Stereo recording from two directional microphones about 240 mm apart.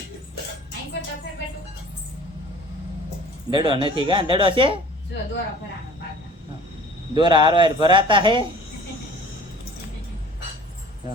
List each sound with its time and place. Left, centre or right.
3.5 s speech: right
7.1 s speech: centre